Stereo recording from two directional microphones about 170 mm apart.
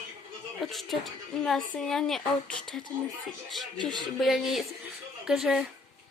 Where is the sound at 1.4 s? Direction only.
Centre (ahead or behind).